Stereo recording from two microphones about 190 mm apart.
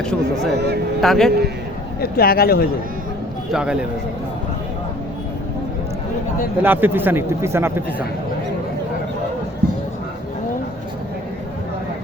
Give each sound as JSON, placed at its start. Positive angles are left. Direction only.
{"t": 0.0, "sound": "speech", "side_deg": 5}
{"t": 2.0, "sound": "speech", "side_deg": 55}
{"t": 3.5, "sound": "speech", "side_deg": -5}
{"t": 6.6, "sound": "a man's voice", "side_deg": -10}